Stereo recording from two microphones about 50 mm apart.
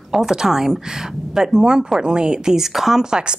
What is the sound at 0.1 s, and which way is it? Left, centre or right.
Speech, centre.